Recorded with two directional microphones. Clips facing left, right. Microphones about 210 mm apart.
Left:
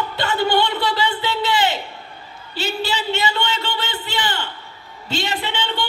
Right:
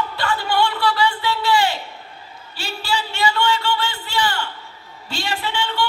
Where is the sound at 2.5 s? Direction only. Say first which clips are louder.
Left 2 dB; 20° left (ahead or behind).